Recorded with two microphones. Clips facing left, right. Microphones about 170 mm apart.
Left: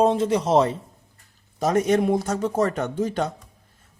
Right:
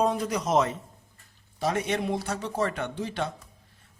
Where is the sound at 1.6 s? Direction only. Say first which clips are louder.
Left 8 dB; 40° left (ahead or behind).